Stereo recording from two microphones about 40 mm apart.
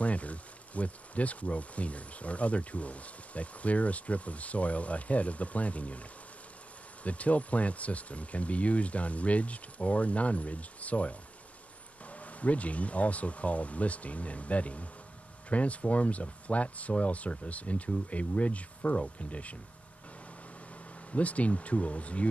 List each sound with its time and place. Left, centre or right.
0.0 s speech: left
21.1 s speech: left